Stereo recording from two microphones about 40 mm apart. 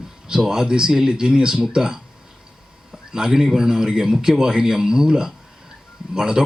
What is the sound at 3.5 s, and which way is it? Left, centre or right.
Speech, centre.